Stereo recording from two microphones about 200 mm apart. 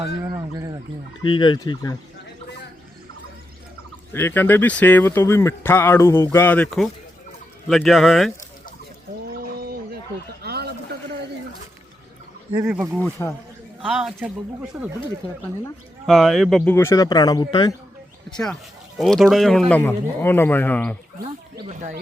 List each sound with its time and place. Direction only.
0.2 s speech: 15° right (ahead or behind)
1.2 s speech: 25° left (ahead or behind)
4.1 s speech: 10° left (ahead or behind)
9.6 s a sound: 50° right (ahead or behind)
12.6 s speech: 5° right (ahead or behind)
13.0 s speech: 10° left (ahead or behind)
13.8 s speech: 5° right (ahead or behind)
16.7 s speech: 15° left (ahead or behind)
18.9 s speech: centre (ahead or behind)
21.7 s speech: 35° right (ahead or behind)